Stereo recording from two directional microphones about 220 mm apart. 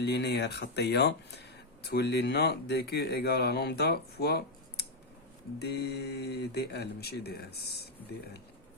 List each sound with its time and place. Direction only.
0.0 s speech: 50° left (ahead or behind)